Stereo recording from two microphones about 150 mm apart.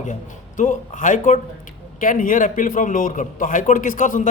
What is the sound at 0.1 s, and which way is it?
Speech, 60° left (ahead or behind).